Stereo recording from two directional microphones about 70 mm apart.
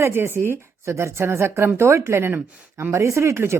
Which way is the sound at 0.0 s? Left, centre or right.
Right.